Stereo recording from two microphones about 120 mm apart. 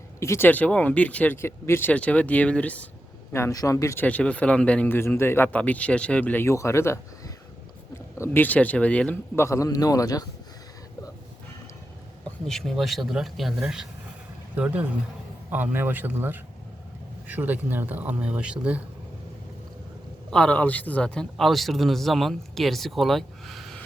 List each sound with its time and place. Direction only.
0.2 s speech: 20° left (ahead or behind)
3.3 s a man's voice: 25° left (ahead or behind)
4.0 s speech: 10° left (ahead or behind)
8.2 s a man's voice: 15° left (ahead or behind)
12.5 s a man's voice: 5° left (ahead or behind)
20.3 s a man's voice: 10° left (ahead or behind)